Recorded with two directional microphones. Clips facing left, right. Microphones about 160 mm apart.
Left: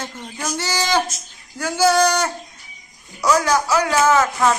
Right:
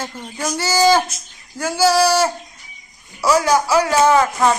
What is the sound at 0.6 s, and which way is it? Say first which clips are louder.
Music: right 7 dB; 5° right (ahead or behind).